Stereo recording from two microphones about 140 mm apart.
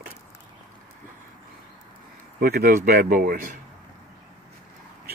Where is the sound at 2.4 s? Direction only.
90° right.